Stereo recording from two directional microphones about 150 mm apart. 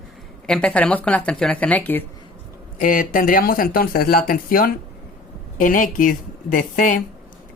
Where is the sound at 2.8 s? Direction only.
65° left (ahead or behind).